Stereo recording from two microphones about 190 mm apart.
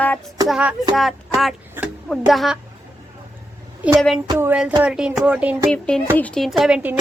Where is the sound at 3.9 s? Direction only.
Centre (ahead or behind).